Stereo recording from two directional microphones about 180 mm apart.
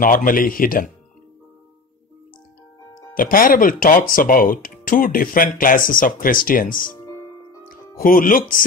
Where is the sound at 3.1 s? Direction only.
50° left (ahead or behind).